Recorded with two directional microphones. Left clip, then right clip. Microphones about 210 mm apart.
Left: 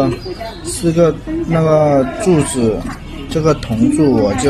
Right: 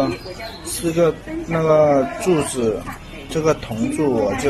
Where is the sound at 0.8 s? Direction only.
Centre (ahead or behind).